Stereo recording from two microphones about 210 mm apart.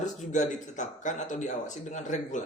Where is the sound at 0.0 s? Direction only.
35° left (ahead or behind).